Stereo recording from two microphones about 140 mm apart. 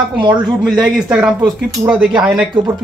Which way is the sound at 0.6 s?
5° right (ahead or behind).